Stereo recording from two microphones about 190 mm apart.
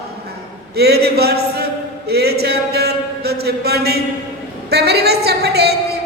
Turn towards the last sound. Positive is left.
turn(degrees=-60)  # may be behind; listen again after turning